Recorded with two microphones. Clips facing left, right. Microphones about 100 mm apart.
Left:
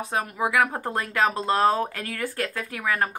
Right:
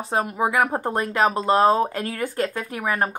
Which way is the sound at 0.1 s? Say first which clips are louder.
Right 3 dB; 25° right (ahead or behind).